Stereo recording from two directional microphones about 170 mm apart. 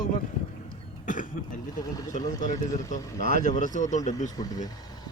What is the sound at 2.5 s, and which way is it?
Speech, 20° left (ahead or behind).